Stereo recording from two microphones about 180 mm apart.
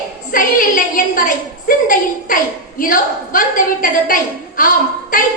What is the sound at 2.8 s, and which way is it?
A woman's voice, 50° left (ahead or behind).